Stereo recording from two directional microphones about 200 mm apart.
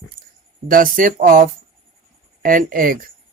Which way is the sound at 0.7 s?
45° right (ahead or behind).